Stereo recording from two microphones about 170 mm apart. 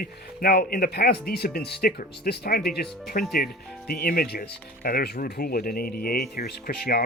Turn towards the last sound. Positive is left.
turn(degrees=65)  # may be behind; listen again after turning